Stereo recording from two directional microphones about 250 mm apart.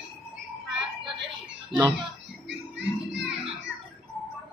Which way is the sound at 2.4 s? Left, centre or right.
Right.